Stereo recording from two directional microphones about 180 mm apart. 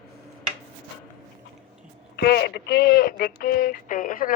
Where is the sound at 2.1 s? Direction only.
65° left (ahead or behind).